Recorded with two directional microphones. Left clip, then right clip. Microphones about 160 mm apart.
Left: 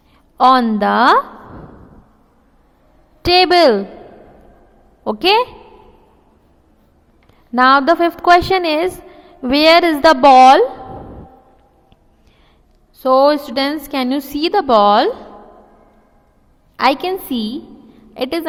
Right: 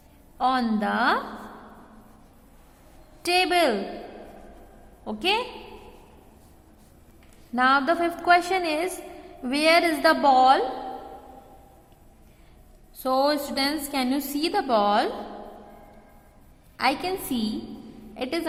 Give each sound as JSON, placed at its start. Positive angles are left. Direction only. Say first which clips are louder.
{"t": 0.3, "sound": "a woman's voice", "louder": "left 13 dB", "side_deg": 60}
{"t": 3.2, "sound": "a woman's voice", "louder": "left 11 dB", "side_deg": 40}
{"t": 5.0, "sound": "a woman's voice", "louder": "left 12 dB", "side_deg": 50}
{"t": 7.5, "sound": "a woman's voice", "louder": "left 10 dB", "side_deg": 45}
{"t": 13.0, "sound": "a woman's voice", "louder": "left 11 dB", "side_deg": 40}
{"t": 16.7, "sound": "a woman's voice", "louder": "left 10 dB", "side_deg": 50}